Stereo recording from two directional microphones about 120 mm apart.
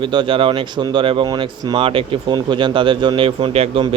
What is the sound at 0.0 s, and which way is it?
Speech, 45° right (ahead or behind).